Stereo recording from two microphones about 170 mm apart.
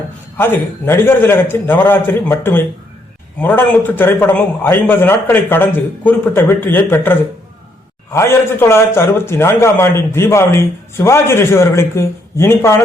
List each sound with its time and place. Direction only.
0.3 s a man's voice: 15° left (ahead or behind)